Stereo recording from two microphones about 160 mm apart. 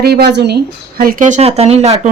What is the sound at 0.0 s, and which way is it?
Speech, 85° right.